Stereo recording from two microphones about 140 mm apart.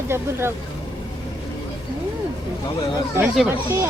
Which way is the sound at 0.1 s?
15° right (ahead or behind).